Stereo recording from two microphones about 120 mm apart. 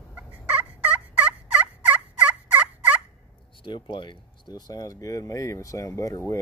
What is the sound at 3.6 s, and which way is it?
Speech, 40° left (ahead or behind).